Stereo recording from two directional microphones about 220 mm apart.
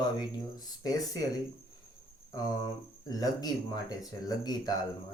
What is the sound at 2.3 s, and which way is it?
Speech, 15° left (ahead or behind).